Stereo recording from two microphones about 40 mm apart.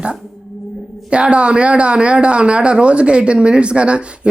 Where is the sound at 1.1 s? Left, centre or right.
Right.